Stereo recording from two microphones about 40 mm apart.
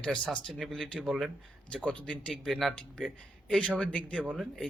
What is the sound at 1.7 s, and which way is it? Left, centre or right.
Speech, left.